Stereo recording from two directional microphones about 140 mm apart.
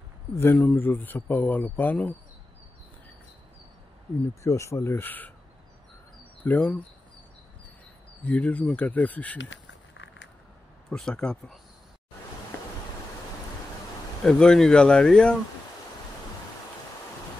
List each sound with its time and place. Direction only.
0.4 s speech: 15° left (ahead or behind)
4.4 s speech: 20° left (ahead or behind)
6.4 s speech: 10° left (ahead or behind)
8.2 s speech: 10° left (ahead or behind)
10.9 s speech: 5° left (ahead or behind)
14.2 s speech: 5° left (ahead or behind)